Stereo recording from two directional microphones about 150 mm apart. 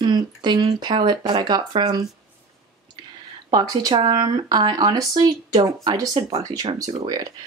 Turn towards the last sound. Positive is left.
turn(degrees=-25)  # may be behind; listen again after turning